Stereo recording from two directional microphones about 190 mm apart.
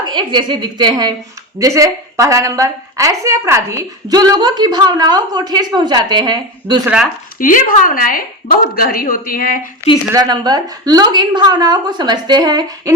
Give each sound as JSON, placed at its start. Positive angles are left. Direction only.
{"t": 0.1, "sound": "a woman's voice", "side_deg": -25}
{"t": 7.3, "sound": "a woman's voice", "side_deg": 45}
{"t": 10.1, "sound": "a woman's voice", "side_deg": -20}